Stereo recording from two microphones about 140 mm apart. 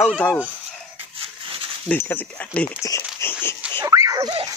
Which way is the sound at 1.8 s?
15° left (ahead or behind).